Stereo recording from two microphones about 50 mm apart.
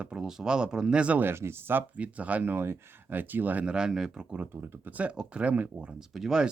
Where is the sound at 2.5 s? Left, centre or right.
Right.